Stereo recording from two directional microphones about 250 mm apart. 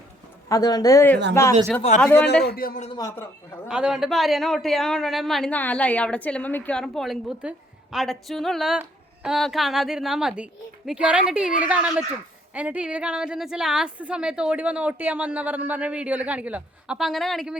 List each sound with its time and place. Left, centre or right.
0.4 s speech: centre
2.2 s a man's voice: left
2.9 s speech: centre
3.7 s a man's voice: centre